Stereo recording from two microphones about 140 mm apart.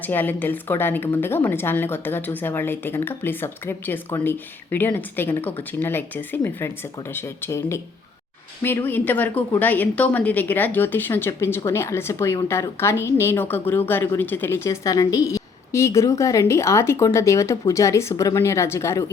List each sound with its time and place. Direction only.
0.0 s a woman's voice: 15° left (ahead or behind)